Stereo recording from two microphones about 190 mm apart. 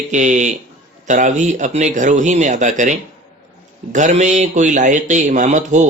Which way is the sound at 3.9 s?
40° right (ahead or behind).